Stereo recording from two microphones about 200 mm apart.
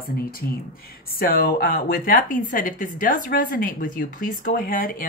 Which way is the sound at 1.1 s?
50° left (ahead or behind).